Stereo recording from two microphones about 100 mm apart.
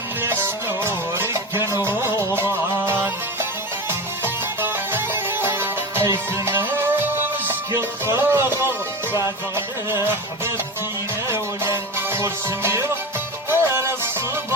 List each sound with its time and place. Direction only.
0.2 s music: 20° right (ahead or behind)
4.6 s music: 20° right (ahead or behind)